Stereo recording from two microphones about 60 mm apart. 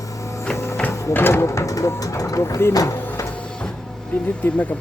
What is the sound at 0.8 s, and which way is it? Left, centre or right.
Speech, left.